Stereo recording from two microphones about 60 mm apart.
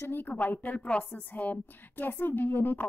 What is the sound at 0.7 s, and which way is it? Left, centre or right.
A woman's voice, centre.